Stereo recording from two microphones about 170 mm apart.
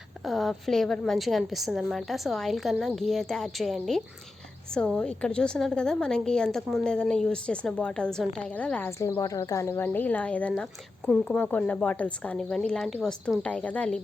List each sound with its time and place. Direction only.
0.3 s a woman's voice: centre (ahead or behind)